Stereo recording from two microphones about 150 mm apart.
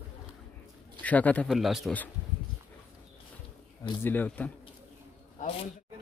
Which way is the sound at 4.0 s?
10° left (ahead or behind).